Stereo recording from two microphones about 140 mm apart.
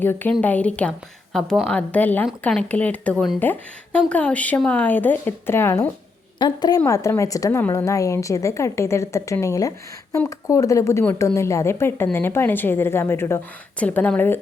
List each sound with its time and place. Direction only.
0.0 s speech: 15° left (ahead or behind)
6.4 s a woman's voice: 30° left (ahead or behind); by 14.3 s 15° left (ahead or behind)